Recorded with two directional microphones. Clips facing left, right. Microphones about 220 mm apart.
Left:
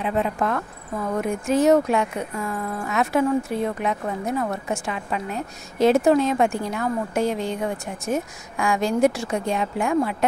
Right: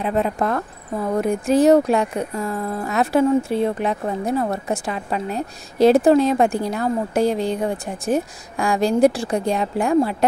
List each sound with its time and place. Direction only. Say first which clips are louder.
0.0 s speech: right 3 dB; 40° right (ahead or behind)